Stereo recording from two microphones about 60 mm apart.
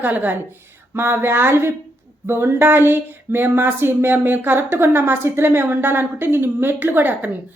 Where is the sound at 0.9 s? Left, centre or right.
Right.